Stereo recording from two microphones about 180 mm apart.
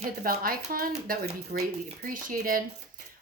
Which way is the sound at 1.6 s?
45° right (ahead or behind).